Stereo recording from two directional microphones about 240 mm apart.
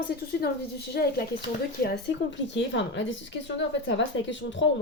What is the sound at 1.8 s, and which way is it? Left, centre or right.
Speech, left.